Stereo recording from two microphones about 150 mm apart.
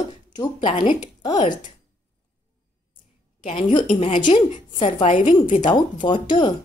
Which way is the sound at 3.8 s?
50° left (ahead or behind).